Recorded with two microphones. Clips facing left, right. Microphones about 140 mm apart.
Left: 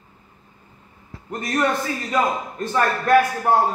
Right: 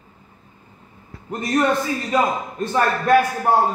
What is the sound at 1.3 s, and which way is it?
Speech, 25° right (ahead or behind).